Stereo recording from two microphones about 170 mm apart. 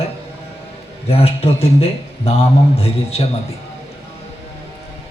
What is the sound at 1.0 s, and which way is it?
A man's voice, 35° left (ahead or behind).